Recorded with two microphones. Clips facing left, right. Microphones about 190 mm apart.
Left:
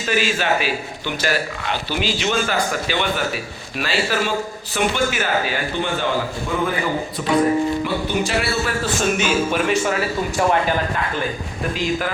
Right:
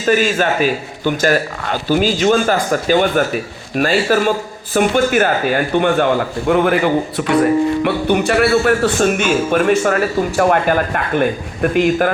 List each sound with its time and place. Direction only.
0.0 s speech: 50° right (ahead or behind)
6.5 s a man's voice: 70° right (ahead or behind)